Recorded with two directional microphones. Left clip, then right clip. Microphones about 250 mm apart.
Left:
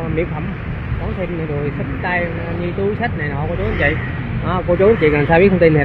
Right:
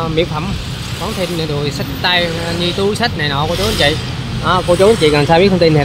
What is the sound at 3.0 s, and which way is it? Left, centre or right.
Speech, right.